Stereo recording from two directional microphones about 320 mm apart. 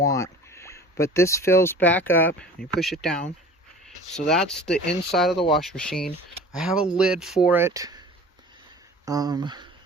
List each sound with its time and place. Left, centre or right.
0.0 s speech: centre
9.0 s speech: centre